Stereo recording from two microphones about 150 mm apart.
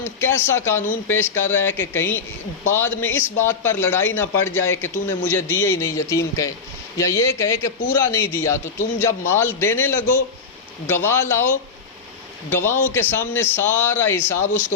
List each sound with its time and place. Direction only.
0.0 s a man's voice: 15° left (ahead or behind)